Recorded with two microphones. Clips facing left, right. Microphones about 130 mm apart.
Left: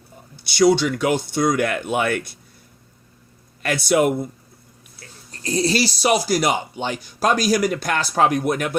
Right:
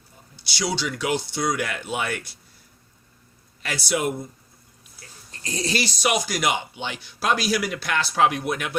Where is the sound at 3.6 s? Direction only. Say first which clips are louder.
Left 8 dB; 55° left (ahead or behind).